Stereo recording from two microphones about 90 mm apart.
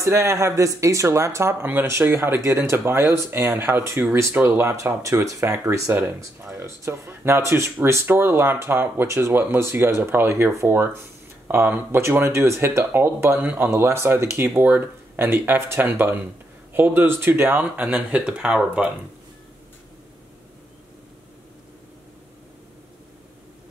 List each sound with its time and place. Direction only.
0.0 s speech: 35° right (ahead or behind); by 18.9 s 10° right (ahead or behind)